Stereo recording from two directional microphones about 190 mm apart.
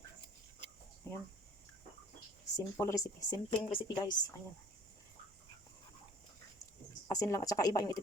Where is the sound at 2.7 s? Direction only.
15° left (ahead or behind).